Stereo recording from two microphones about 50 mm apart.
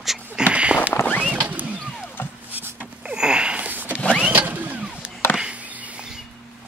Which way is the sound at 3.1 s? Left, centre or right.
Centre.